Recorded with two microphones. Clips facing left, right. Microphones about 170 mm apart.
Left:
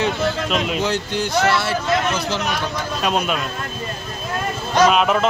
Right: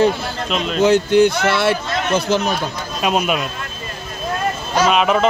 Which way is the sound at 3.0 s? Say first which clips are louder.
Right 3 dB; 10° right (ahead or behind).